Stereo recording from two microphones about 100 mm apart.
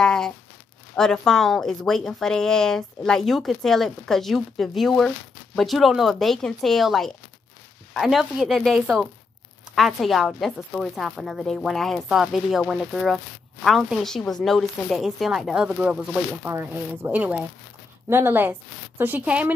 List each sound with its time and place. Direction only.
0.0 s a sound: 5° left (ahead or behind)
0.9 s a woman's voice: 5° left (ahead or behind)
16.4 s speech: 25° right (ahead or behind)